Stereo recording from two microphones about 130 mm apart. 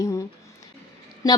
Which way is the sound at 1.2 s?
25° left (ahead or behind).